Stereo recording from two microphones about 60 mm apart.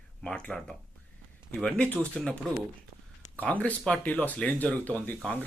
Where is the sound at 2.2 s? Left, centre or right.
Centre.